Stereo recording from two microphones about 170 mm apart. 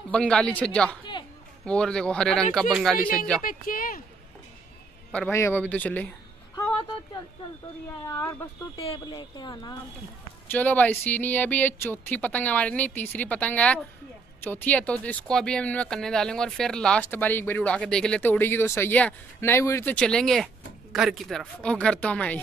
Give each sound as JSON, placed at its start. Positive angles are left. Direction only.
{"t": 0.1, "sound": "a man's voice", "side_deg": 5}
{"t": 3.4, "sound": "speech", "side_deg": 55}
{"t": 5.3, "sound": "speech", "side_deg": 15}
{"t": 8.1, "sound": "speech", "side_deg": 15}
{"t": 8.8, "sound": "speech", "side_deg": 30}
{"t": 10.5, "sound": "a man's voice", "side_deg": 10}